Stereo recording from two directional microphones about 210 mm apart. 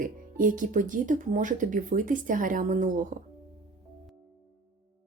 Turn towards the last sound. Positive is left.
turn(degrees=-40)  # may be behind; listen again after turning